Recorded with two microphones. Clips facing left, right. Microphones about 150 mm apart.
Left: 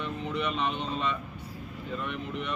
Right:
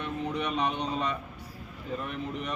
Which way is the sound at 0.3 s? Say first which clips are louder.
Even; 40° right (ahead or behind).